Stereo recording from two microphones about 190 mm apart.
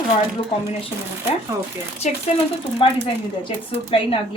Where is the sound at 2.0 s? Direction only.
40° left (ahead or behind).